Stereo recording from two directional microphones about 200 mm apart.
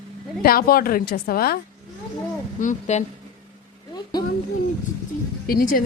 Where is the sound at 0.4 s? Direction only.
50° left (ahead or behind).